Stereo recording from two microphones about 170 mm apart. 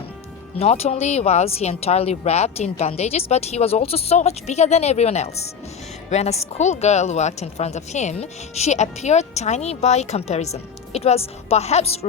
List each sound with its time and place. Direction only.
0.6 s a woman's voice: 40° left (ahead or behind)